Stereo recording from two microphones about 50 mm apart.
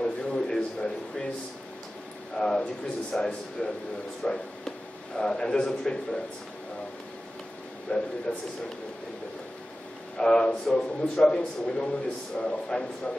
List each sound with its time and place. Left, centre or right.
0.0 s a sound: centre
2.3 s speech: centre
7.9 s speech: left
10.1 s speech: centre